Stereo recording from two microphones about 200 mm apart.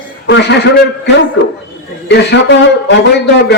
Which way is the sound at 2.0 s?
60° left (ahead or behind).